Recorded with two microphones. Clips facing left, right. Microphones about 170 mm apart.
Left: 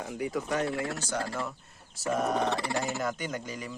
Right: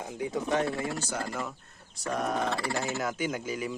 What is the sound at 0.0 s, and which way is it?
Speech, 25° right (ahead or behind).